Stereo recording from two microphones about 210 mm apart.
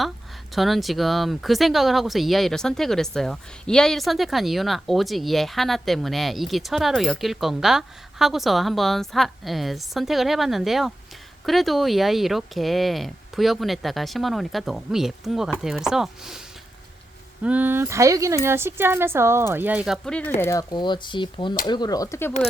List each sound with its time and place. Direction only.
0.5 s speech: centre (ahead or behind)
17.4 s speech: 5° right (ahead or behind); by 22.3 s 15° left (ahead or behind)